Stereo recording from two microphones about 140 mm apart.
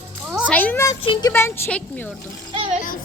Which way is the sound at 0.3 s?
5° right (ahead or behind).